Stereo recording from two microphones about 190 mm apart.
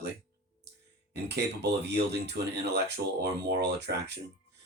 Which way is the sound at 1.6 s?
60° right (ahead or behind).